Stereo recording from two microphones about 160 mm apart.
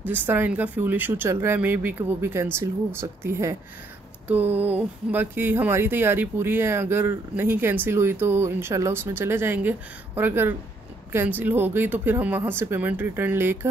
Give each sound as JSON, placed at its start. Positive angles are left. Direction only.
{"t": 0.0, "sound": "speech", "side_deg": -10}